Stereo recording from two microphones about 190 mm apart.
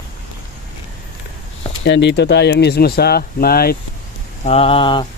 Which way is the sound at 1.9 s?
65° left (ahead or behind).